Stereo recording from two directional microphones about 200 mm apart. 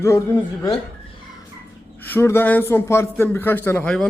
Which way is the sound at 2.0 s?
10° left (ahead or behind).